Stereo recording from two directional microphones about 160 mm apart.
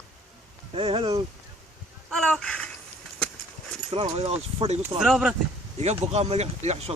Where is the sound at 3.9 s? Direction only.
35° right (ahead or behind).